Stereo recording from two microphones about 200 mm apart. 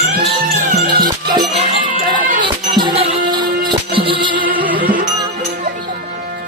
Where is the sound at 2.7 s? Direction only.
25° right (ahead or behind).